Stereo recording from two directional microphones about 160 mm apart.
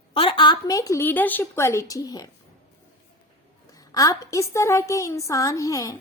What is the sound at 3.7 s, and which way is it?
A woman's voice, 20° left (ahead or behind).